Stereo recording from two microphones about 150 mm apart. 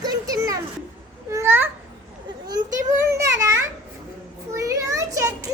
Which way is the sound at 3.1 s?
20° right (ahead or behind).